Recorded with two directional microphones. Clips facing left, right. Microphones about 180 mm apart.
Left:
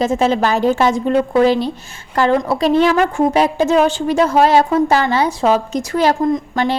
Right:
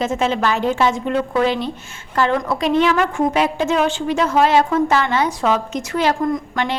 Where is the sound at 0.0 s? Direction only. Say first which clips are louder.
Left 4 dB; 35° left (ahead or behind).